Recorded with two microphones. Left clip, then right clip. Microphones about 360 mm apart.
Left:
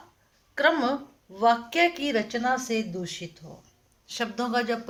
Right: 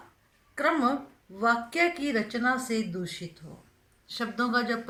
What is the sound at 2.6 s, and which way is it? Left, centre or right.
Speech, left.